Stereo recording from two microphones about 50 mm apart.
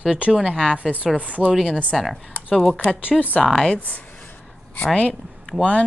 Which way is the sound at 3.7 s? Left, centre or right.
Left.